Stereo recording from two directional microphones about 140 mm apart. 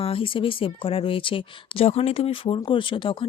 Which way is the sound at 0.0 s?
40° left (ahead or behind).